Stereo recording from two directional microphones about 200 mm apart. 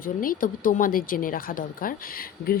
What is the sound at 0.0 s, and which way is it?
Speech, 45° left (ahead or behind).